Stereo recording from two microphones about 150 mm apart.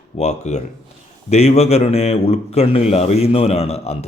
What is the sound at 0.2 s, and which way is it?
Speech, 50° left (ahead or behind).